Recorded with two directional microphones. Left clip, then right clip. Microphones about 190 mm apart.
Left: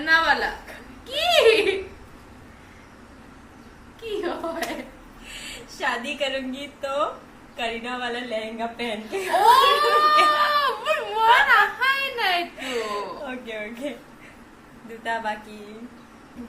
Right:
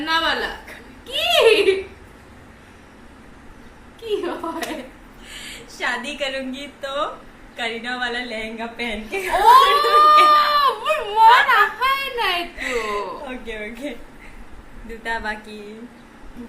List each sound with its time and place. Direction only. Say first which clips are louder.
0.0 s a sound: left 1 dB; 15° left (ahead or behind)
4.0 s a sound: right 3 dB; 15° left (ahead or behind)
5.7 s a woman's voice: right 2 dB; 10° right (ahead or behind)
9.5 s speech: right 5 dB; 15° left (ahead or behind)
12.8 s a woman's voice: right 3 dB; 10° right (ahead or behind)
15.0 s a woman's voice: right 1 dB; 15° right (ahead or behind)